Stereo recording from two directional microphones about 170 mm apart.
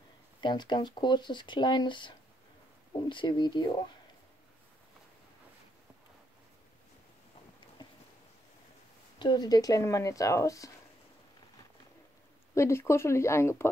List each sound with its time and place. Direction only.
0.4 s speech: 25° left (ahead or behind)
9.2 s speech: 25° left (ahead or behind)
12.5 s speech: 15° left (ahead or behind)